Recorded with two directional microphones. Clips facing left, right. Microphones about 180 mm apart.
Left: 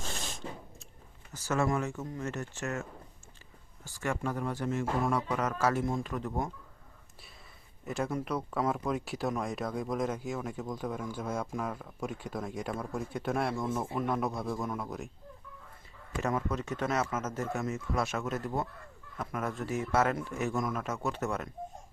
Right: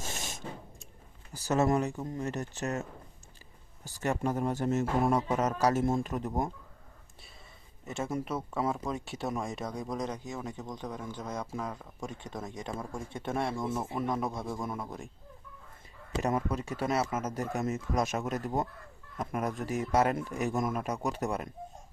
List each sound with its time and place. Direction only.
0.0 s a sound: 15° right (ahead or behind)
1.3 s speech: 35° right (ahead or behind)
1.8 s speech: 15° right (ahead or behind)
2.2 s speech: 35° right (ahead or behind)
3.9 s speech: 20° right (ahead or behind)
4.4 s speech: 40° right (ahead or behind)
5.1 s speech: 20° right (ahead or behind)
5.5 s speech: 40° right (ahead or behind)
6.1 s speech: 20° right (ahead or behind)
7.9 s speech: centre (ahead or behind)
13.7 s speech: 10° right (ahead or behind)
14.1 s speech: centre (ahead or behind)
16.2 s speech: 15° right (ahead or behind)